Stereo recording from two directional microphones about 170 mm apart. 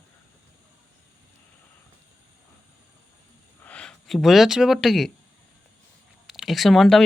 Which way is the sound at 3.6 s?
5° left (ahead or behind).